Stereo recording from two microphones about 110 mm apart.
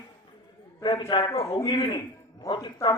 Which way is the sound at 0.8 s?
45° left (ahead or behind).